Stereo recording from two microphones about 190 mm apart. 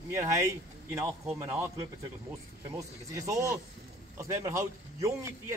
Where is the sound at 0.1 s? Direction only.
15° right (ahead or behind).